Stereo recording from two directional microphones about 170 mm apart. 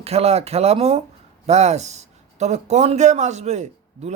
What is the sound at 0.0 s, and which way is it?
A man's voice, 40° right (ahead or behind).